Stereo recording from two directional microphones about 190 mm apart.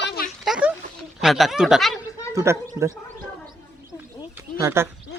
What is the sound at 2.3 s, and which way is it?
Speech, 15° right (ahead or behind).